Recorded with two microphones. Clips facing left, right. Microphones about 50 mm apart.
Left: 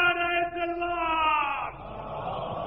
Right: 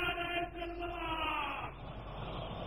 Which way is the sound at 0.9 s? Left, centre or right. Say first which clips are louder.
Left 13 dB; left.